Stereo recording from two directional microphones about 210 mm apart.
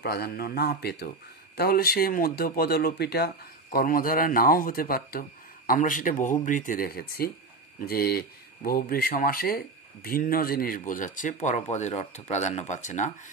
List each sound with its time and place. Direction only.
0.0 s speech: 50° left (ahead or behind)